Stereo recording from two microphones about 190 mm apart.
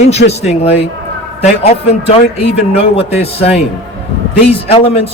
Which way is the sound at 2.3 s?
30° left (ahead or behind).